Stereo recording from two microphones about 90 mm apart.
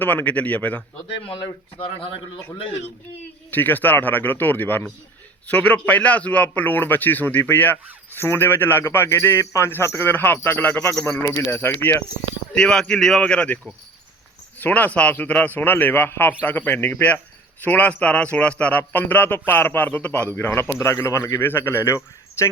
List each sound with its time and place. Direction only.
0.0 s speech: 20° left (ahead or behind)
1.0 s speech: 75° left (ahead or behind)
1.8 s a man's voice: 85° left
3.5 s speech: 20° left (ahead or behind)
12.5 s speech: 10° left (ahead or behind)
14.6 s speech: 15° left (ahead or behind)